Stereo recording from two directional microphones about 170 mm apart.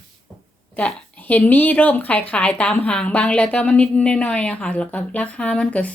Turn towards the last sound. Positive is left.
turn(degrees=10)  # may be behind; listen again after turning